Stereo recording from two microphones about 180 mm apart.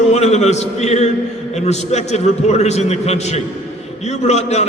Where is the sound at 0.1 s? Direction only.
40° left (ahead or behind).